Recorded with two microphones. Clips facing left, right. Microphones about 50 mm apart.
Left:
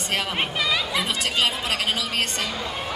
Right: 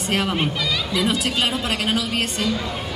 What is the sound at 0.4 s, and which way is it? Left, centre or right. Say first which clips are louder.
Speech: right 1 dB; centre.